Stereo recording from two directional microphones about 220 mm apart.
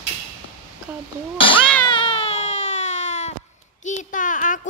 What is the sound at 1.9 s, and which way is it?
Baby cry, 25° left (ahead or behind).